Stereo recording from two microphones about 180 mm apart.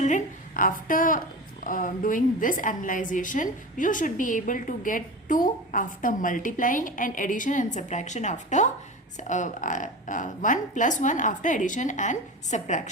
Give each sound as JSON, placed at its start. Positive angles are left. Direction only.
{"t": 0.0, "sound": "a woman's voice", "side_deg": 45}